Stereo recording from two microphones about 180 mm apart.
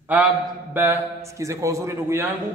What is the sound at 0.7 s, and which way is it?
A man's voice, 15° right (ahead or behind).